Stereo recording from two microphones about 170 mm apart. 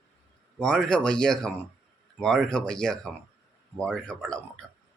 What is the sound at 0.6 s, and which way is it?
Speech, 5° left (ahead or behind).